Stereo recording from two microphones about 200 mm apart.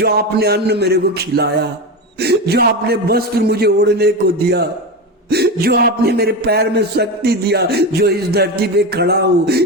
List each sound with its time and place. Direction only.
0.0 s a man's voice: 50° right (ahead or behind)